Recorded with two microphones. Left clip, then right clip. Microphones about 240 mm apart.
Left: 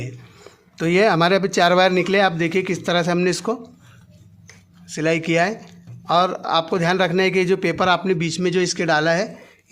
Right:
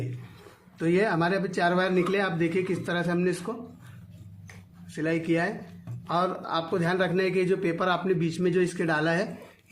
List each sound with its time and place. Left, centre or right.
0.8 s a man's voice: left
4.9 s a man's voice: left